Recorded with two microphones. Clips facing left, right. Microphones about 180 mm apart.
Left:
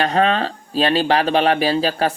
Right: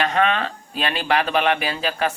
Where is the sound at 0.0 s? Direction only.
35° left (ahead or behind).